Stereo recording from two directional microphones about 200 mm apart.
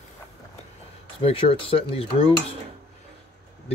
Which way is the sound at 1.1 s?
25° left (ahead or behind).